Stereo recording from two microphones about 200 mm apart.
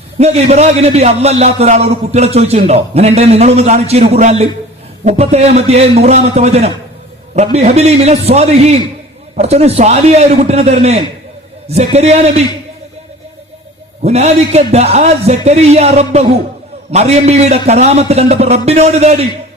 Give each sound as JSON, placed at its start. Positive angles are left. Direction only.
{"t": 0.2, "sound": "a man's voice", "side_deg": -30}
{"t": 14.0, "sound": "a man's voice", "side_deg": -35}